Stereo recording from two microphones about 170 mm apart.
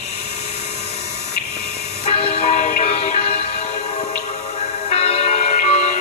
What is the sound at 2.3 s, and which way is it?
Music, 40° left (ahead or behind).